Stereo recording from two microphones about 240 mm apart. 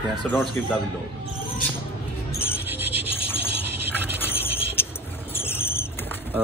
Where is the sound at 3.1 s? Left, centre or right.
Left.